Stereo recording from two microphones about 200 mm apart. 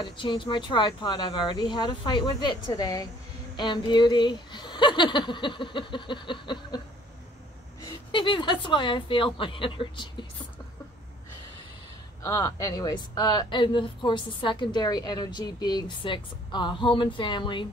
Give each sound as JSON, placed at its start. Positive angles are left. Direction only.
{"t": 0.0, "sound": "a woman's voice", "side_deg": 25}
{"t": 8.1, "sound": "a woman's voice", "side_deg": 25}
{"t": 12.2, "sound": "a woman's voice", "side_deg": 15}